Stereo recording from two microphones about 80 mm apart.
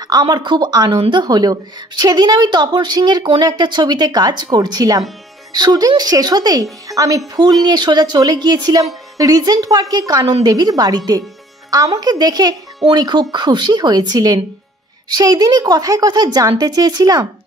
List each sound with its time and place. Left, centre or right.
0.1 s speech: right
7.6 s a woman's voice: right